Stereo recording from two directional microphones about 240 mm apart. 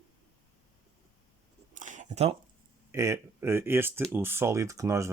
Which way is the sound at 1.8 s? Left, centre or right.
Right.